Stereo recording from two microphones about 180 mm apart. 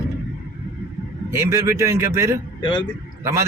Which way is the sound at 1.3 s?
15° right (ahead or behind).